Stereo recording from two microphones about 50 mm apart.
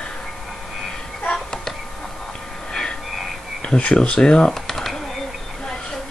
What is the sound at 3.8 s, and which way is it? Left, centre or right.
Speech, centre.